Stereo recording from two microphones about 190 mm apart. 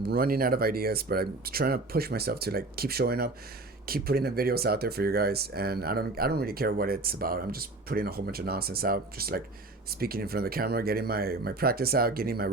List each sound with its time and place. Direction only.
0.0 s speech: 50° right (ahead or behind)